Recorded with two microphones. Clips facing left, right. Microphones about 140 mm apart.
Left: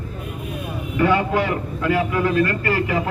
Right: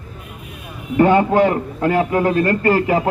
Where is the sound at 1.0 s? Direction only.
45° right (ahead or behind).